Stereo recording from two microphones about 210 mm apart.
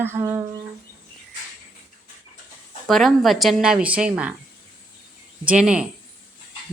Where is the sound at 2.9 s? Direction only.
Centre (ahead or behind).